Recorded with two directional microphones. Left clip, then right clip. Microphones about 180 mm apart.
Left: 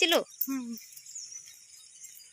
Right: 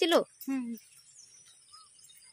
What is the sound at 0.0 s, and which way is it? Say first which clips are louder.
Speech: left 1 dB; 20° right (ahead or behind).